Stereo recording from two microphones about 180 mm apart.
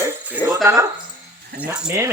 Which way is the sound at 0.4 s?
15° right (ahead or behind).